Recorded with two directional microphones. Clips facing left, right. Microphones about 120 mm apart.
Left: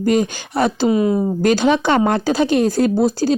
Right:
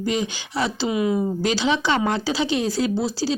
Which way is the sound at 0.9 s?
35° left (ahead or behind).